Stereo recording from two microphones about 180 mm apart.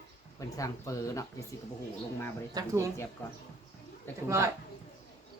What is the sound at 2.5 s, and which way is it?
Speech, 15° right (ahead or behind).